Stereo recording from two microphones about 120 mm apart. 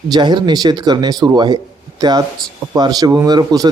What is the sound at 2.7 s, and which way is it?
Speech, 35° right (ahead or behind).